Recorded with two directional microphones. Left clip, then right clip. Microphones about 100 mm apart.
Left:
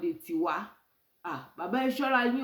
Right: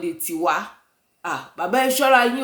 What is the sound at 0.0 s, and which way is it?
A woman's voice, 30° right (ahead or behind).